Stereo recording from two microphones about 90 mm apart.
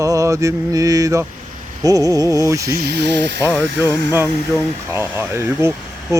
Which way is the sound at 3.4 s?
25° right (ahead or behind).